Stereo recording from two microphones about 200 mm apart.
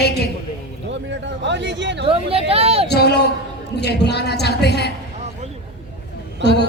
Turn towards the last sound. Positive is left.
turn(degrees=55)  # may be behind; listen again after turning